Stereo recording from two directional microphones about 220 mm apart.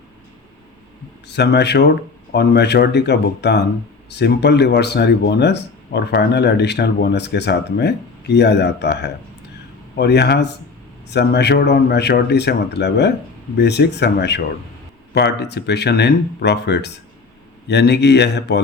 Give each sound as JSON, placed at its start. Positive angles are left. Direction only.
{"t": 1.3, "sound": "speech", "side_deg": 50}